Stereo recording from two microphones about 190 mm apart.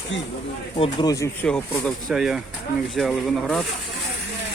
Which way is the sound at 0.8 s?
25° left (ahead or behind).